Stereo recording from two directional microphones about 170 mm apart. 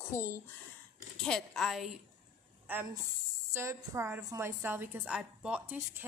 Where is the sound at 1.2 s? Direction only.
Centre (ahead or behind).